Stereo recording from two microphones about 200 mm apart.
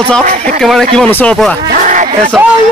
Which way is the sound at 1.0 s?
10° left (ahead or behind).